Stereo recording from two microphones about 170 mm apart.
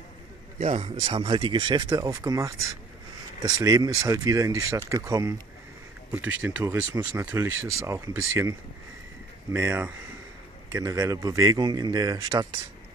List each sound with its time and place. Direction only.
0.6 s speech: 40° right (ahead or behind); by 12.4 s 20° right (ahead or behind)